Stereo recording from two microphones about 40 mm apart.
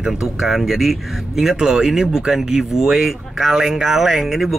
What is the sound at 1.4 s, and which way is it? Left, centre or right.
Speech, centre.